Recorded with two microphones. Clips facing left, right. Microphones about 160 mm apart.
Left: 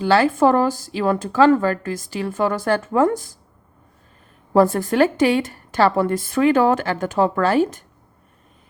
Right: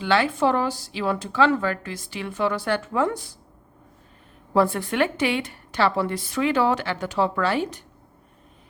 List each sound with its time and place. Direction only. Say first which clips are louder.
0.0 s speech: left 5 dB; 40° left (ahead or behind)
4.5 s speech: left 5 dB; 45° left (ahead or behind)